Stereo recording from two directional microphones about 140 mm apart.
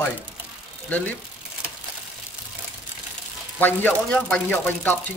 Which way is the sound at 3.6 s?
15° left (ahead or behind).